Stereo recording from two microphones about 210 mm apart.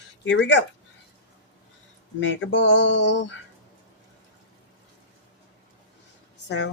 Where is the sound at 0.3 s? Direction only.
60° left (ahead or behind).